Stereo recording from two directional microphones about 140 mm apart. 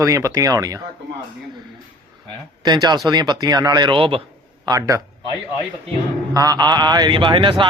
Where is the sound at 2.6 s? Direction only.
30° right (ahead or behind).